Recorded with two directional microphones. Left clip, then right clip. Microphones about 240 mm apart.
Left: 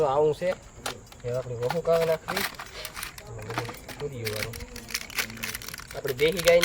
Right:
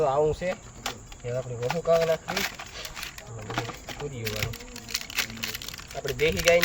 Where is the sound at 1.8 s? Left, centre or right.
Centre.